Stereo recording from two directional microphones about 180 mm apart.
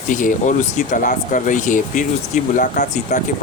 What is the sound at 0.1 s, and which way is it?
Speech, 45° left (ahead or behind).